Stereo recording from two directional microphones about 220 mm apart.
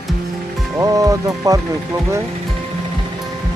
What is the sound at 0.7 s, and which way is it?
Speech, 15° right (ahead or behind).